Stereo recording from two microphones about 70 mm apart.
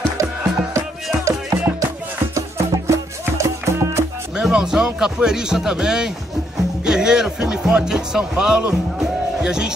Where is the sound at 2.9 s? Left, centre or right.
Right.